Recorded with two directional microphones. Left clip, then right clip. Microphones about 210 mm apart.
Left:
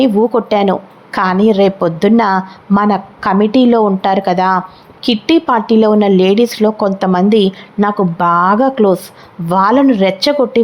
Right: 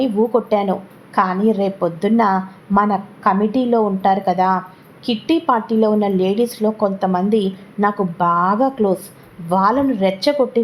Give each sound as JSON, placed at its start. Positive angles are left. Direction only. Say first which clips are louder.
{"t": 0.0, "sound": "a woman's voice", "louder": "left 5 dB", "side_deg": 25}